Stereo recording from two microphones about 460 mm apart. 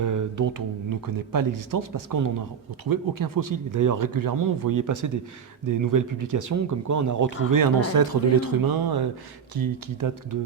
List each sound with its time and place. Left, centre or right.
0.0 s speech: right